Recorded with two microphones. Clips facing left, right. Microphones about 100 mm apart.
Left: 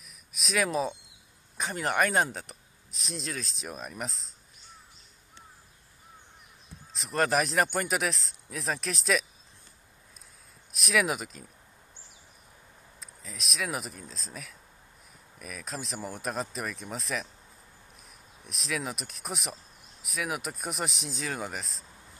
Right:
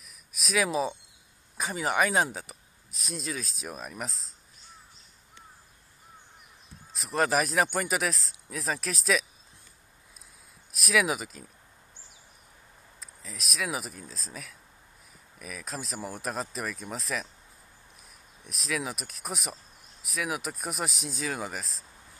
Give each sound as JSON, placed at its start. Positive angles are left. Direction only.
{"t": 0.0, "sound": "a sound", "side_deg": 0}
{"t": 1.6, "sound": "speech", "side_deg": 0}
{"t": 6.9, "sound": "speech", "side_deg": 0}
{"t": 10.7, "sound": "speech", "side_deg": 0}
{"t": 13.0, "sound": "speech", "side_deg": 0}
{"t": 18.4, "sound": "speech", "side_deg": 0}